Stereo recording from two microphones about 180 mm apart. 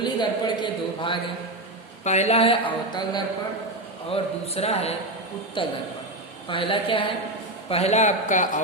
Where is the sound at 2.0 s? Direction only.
40° left (ahead or behind).